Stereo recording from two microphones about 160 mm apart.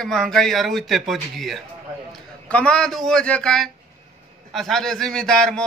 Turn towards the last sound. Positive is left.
turn(degrees=5)  # may be behind; listen again after turning